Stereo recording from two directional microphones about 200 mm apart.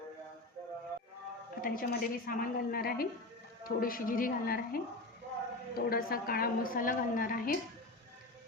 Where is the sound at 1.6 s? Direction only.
45° left (ahead or behind).